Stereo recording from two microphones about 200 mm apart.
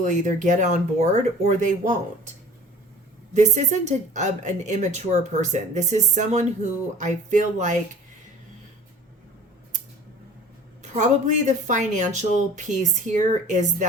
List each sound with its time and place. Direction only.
0.0 s speech: 40° right (ahead or behind)
3.3 s speech: 35° right (ahead or behind)
10.9 s speech: 35° right (ahead or behind)